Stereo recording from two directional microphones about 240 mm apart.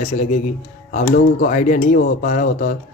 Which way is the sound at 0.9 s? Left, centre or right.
Left.